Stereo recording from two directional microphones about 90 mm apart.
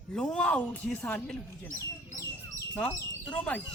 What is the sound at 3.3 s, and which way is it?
Speech, 15° left (ahead or behind).